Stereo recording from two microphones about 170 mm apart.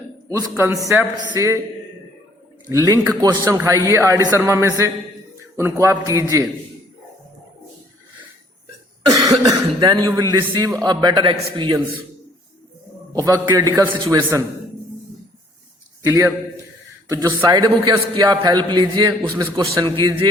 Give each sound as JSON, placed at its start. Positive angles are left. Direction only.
{"t": 0.3, "sound": "a man's voice", "side_deg": -15}
{"t": 2.6, "sound": "a man's voice", "side_deg": -20}
{"t": 9.0, "sound": "a man's voice", "side_deg": -20}
{"t": 13.1, "sound": "a man's voice", "side_deg": -20}
{"t": 16.0, "sound": "a man's voice", "side_deg": -15}